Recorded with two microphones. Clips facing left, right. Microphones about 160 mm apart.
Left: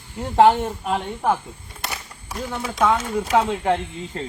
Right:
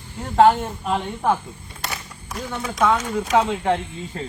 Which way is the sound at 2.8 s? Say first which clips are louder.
Even; 5° left (ahead or behind).